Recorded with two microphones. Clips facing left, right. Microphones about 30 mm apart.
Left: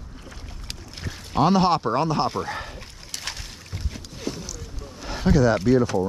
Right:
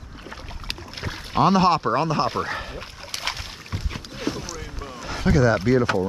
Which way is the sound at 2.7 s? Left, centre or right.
Right.